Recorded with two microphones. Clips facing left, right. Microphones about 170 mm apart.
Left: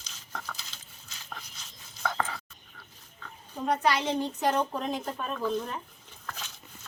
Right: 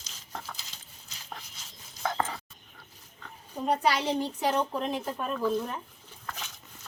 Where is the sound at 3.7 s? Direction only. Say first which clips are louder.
Even; 10° right (ahead or behind).